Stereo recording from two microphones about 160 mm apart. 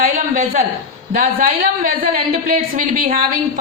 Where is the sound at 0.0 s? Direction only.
55° right (ahead or behind).